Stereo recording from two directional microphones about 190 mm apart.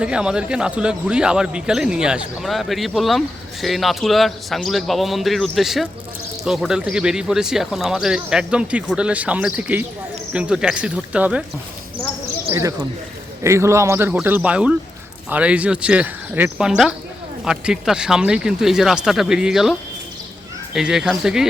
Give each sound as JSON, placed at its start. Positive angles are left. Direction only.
{"t": 0.0, "sound": "a man's voice", "side_deg": -5}
{"t": 12.5, "sound": "a man's voice", "side_deg": -15}
{"t": 20.7, "sound": "a man's voice", "side_deg": 0}